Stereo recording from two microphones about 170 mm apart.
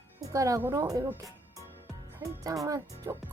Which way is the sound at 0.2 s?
20° right (ahead or behind).